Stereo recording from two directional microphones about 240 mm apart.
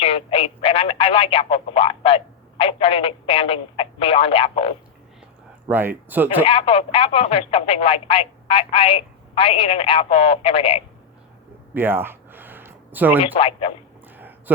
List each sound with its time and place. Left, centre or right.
0.0 s speech: left
5.6 s speech: centre
6.4 s speech: left
11.7 s a sound: centre
13.2 s speech: left
14.2 s a sound: centre